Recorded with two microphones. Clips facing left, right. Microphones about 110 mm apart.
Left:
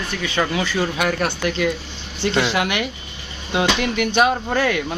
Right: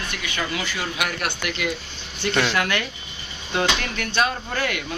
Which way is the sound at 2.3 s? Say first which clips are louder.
Left 2 dB; 20° left (ahead or behind).